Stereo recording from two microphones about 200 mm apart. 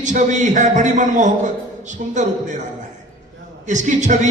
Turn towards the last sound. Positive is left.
turn(degrees=-40)  # may be behind; listen again after turning